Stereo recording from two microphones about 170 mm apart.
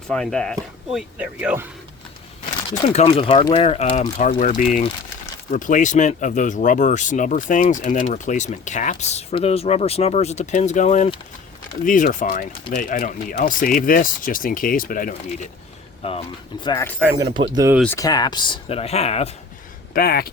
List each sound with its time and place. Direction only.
0.1 s speech: 5° left (ahead or behind)
2.9 s speech: 35° left (ahead or behind); by 15.4 s 55° left (ahead or behind)
17.0 s speech: 5° right (ahead or behind)
17.5 s speech: 20° right (ahead or behind)
17.8 s speech: 20° left (ahead or behind); by 19.3 s 40° left (ahead or behind)
19.9 s speech: 60° left (ahead or behind)